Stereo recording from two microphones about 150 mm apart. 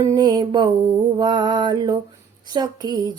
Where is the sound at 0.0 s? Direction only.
25° right (ahead or behind).